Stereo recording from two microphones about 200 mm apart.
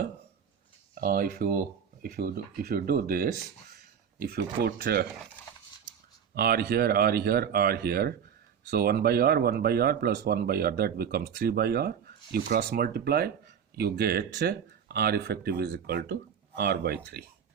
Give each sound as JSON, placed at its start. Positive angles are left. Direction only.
{"t": 0.9, "sound": "speech", "side_deg": -45}
{"t": 6.3, "sound": "speech", "side_deg": -50}